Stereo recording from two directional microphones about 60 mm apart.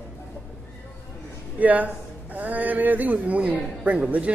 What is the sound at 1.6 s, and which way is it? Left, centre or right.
A man's voice, right.